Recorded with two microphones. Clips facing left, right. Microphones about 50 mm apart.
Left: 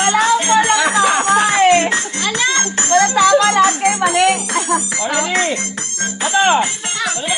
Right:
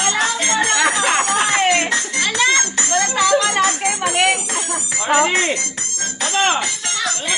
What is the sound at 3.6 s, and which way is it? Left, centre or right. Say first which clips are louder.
Music: left 5 dB; left.